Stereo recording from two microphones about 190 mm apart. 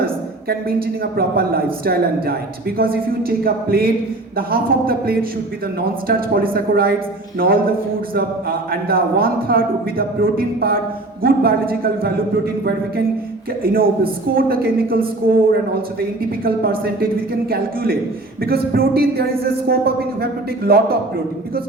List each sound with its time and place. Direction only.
0.0 s a woman's voice: 50° right (ahead or behind)
13.6 s a woman's voice: 50° right (ahead or behind)
18.4 s a woman's voice: 50° right (ahead or behind)